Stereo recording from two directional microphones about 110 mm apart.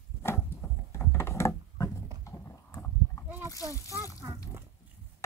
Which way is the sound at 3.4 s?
30° left (ahead or behind).